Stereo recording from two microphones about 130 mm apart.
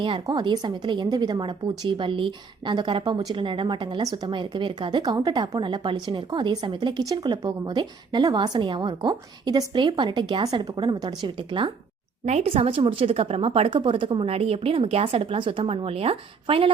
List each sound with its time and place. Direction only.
0.3 s speech: 35° right (ahead or behind)
12.2 s a woman's voice: 55° right (ahead or behind)